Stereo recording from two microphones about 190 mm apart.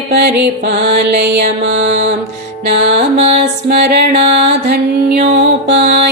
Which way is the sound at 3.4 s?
60° right (ahead or behind).